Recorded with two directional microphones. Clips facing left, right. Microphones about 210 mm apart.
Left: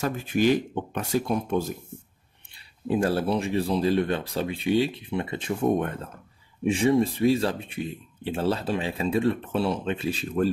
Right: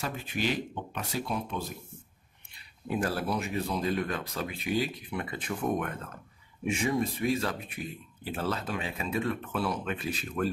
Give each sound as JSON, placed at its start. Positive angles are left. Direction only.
{"t": 0.0, "sound": "speech", "side_deg": 45}
{"t": 2.5, "sound": "speech", "side_deg": 30}